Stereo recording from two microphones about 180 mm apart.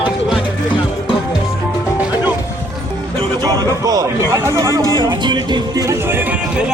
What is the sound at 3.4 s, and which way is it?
Music, 20° right (ahead or behind).